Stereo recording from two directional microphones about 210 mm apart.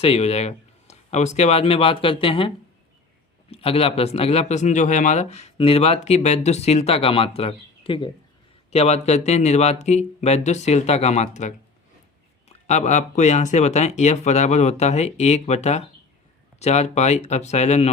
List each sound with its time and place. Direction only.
0.0 s speech: 30° left (ahead or behind)
3.5 s speech: 25° left (ahead or behind)